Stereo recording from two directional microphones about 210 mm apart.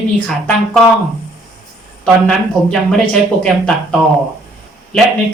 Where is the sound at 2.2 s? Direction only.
5° left (ahead or behind).